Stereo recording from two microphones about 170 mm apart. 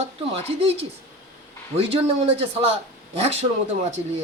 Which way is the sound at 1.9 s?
35° right (ahead or behind).